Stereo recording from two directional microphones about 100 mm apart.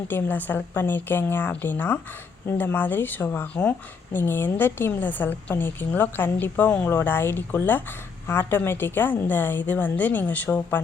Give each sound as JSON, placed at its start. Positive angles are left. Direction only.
{"t": 0.1, "sound": "a woman's voice", "side_deg": 20}